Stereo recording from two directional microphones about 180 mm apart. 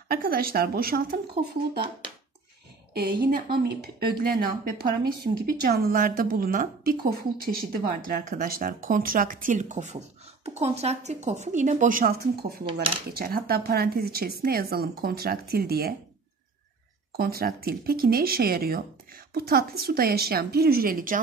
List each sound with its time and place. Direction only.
0.1 s speech: 55° right (ahead or behind)
2.9 s speech: 55° right (ahead or behind)
17.2 s speech: 55° right (ahead or behind)